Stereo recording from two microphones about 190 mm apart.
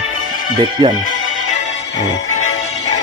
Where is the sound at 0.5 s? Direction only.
25° right (ahead or behind).